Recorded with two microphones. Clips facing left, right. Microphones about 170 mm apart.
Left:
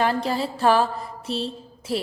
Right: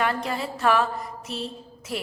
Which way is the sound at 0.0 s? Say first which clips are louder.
Left 4 dB; 30° left (ahead or behind).